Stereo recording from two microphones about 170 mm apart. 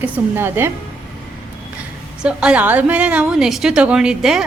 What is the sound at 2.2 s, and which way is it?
A woman's voice, 5° right (ahead or behind).